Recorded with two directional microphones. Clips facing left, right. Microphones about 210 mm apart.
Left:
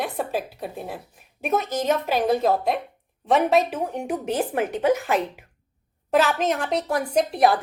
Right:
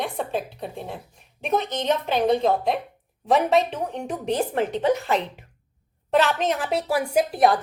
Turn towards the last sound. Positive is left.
turn(degrees=0)  # may be behind; listen again after turning